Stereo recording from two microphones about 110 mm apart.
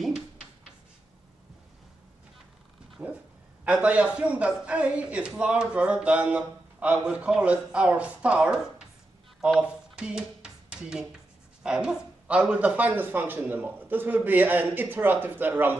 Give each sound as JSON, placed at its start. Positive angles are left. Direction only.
{"t": 3.0, "sound": "dog", "side_deg": -5}
{"t": 3.6, "sound": "a man's voice", "side_deg": -10}
{"t": 9.4, "sound": "a sound", "side_deg": -10}
{"t": 11.6, "sound": "a man's voice", "side_deg": -5}